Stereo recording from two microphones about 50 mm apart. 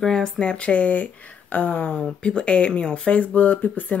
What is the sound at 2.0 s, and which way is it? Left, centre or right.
Speech, centre.